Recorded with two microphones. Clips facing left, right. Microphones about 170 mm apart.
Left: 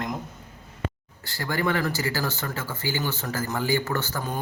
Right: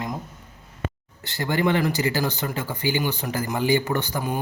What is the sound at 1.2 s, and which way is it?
Speech, 20° right (ahead or behind).